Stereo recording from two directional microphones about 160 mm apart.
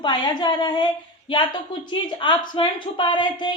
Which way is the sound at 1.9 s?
30° left (ahead or behind).